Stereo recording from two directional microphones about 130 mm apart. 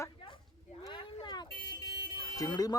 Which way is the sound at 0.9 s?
40° left (ahead or behind).